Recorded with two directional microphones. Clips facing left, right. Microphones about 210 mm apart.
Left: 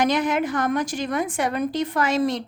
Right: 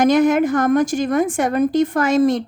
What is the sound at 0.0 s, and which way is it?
A woman's voice, 45° right (ahead or behind).